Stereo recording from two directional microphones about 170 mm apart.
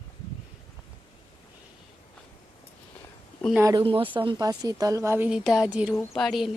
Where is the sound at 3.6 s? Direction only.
20° right (ahead or behind).